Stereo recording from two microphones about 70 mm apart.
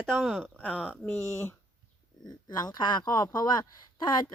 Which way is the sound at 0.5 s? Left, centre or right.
Left.